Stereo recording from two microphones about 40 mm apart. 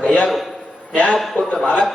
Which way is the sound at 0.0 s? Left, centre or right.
Left.